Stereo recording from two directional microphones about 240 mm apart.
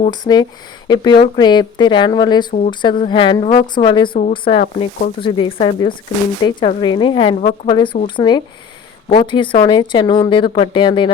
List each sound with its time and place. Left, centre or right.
0.1 s speech: centre
4.1 s a woman's voice: left
5.2 s speech: left